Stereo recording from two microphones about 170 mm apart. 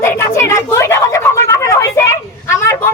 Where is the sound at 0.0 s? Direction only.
15° left (ahead or behind).